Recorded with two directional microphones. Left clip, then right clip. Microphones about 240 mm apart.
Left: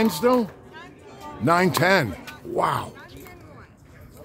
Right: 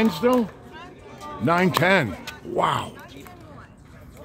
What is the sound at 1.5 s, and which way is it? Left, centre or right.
Speech, centre.